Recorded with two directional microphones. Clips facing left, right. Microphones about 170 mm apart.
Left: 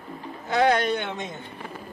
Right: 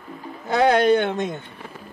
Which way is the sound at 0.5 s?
40° right (ahead or behind).